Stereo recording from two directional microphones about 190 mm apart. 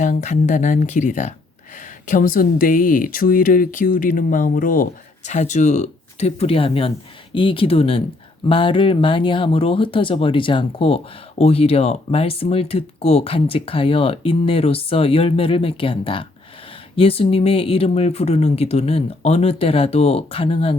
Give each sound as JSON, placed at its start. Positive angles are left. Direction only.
{"t": 0.0, "sound": "speech", "side_deg": 40}